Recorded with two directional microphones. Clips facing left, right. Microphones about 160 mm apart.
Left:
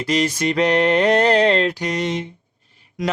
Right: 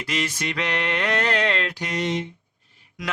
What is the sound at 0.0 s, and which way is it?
Mantra, 35° left (ahead or behind).